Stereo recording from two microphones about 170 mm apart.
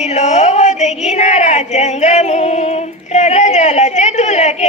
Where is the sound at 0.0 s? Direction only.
40° left (ahead or behind).